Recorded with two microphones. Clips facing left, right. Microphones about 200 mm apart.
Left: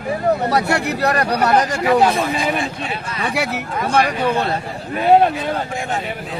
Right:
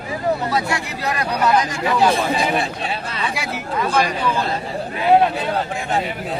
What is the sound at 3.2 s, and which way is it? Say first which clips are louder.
A man's voice: left 7 dB; 65° left (ahead or behind).